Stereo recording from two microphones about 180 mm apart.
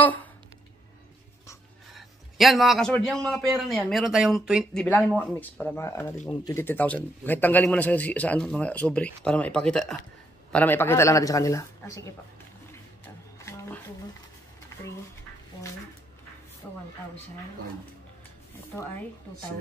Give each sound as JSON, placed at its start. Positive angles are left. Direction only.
{"t": 0.0, "sound": "speech", "side_deg": 10}
{"t": 2.0, "sound": "a man's voice", "side_deg": 0}
{"t": 4.8, "sound": "a man's voice", "side_deg": 10}
{"t": 13.5, "sound": "a sound", "side_deg": 15}
{"t": 16.6, "sound": "speech", "side_deg": 5}